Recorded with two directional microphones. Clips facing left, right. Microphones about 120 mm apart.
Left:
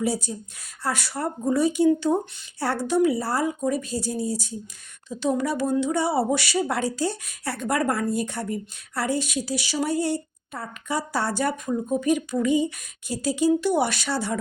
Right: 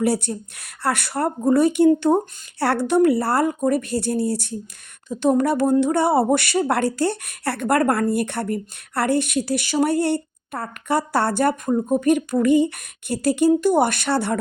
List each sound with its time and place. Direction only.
0.0 s speech: 65° right (ahead or behind)
5.0 s speech: 55° right (ahead or behind)
13.5 s speech: 50° right (ahead or behind)